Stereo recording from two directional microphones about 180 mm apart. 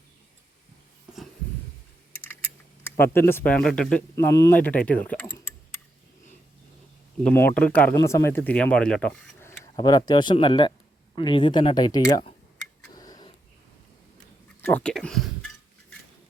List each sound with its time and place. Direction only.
3.0 s speech: 10° left (ahead or behind)
4.1 s speech: 15° left (ahead or behind)
4.9 s a sound: 10° left (ahead or behind)
7.3 s speech: 10° left (ahead or behind)
12.9 s a sound: 20° left (ahead or behind)
14.6 s speech: 10° left (ahead or behind)